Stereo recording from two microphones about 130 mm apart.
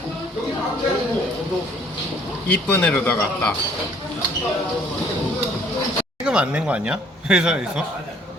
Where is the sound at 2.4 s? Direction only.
15° left (ahead or behind).